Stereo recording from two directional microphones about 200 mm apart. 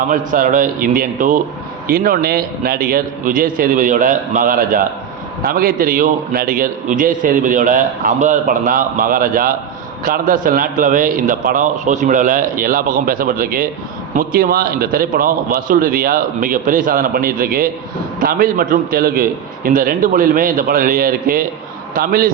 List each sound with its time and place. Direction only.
0.1 s a man's voice: 45° right (ahead or behind)